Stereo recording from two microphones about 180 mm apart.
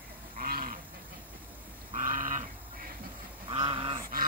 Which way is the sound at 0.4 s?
55° right (ahead or behind).